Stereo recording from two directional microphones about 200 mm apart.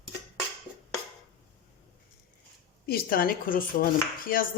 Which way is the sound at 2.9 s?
50° left (ahead or behind).